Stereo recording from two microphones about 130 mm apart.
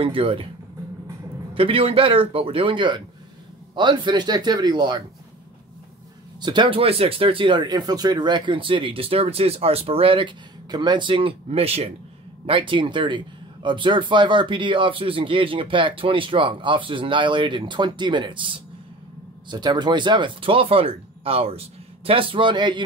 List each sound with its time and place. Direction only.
0.0 s speech: 45° right (ahead or behind)
1.5 s speech: 45° right (ahead or behind)
6.4 s speech: 40° right (ahead or behind)